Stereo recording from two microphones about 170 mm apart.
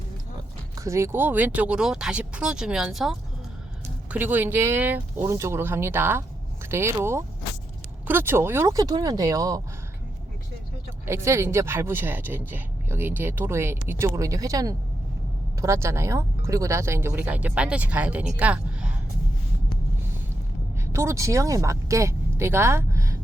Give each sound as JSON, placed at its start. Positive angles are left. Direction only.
{"t": 0.8, "sound": "speech", "side_deg": -15}
{"t": 11.0, "sound": "speech", "side_deg": -15}
{"t": 20.7, "sound": "speech", "side_deg": -15}